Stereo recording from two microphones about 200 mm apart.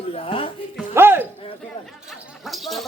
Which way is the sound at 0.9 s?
10° right (ahead or behind).